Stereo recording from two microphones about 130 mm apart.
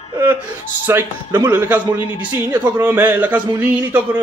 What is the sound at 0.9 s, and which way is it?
A man's voice, 20° right (ahead or behind).